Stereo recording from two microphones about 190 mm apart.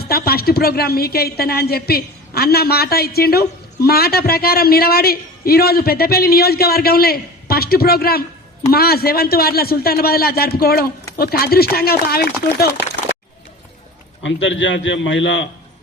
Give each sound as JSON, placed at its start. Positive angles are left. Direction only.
{"t": 0.0, "sound": "speech", "side_deg": 55}
{"t": 14.2, "sound": "a man's voice", "side_deg": 80}